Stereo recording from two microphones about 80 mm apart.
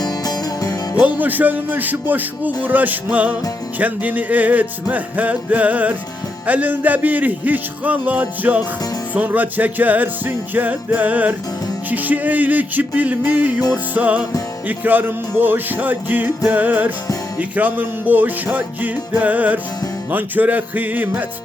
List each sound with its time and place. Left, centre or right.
0.0 s music: left
1.0 s music: right